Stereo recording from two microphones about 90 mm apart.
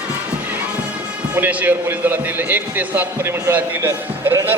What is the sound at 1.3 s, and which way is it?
A man's voice, 20° right (ahead or behind).